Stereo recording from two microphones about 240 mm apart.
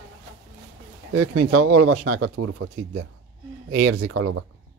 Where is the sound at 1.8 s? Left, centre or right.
Right.